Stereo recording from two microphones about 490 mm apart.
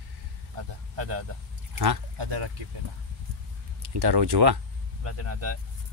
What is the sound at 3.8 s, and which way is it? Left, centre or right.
Speech, right.